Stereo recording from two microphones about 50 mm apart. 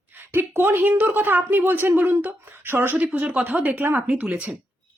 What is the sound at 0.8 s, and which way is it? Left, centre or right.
Speech, right.